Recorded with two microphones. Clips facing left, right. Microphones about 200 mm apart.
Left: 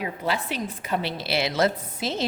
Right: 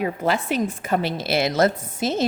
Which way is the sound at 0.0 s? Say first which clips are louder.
Right 5 dB; 50° right (ahead or behind).